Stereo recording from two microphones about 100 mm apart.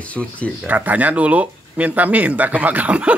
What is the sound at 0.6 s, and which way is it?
A man's voice, 15° right (ahead or behind).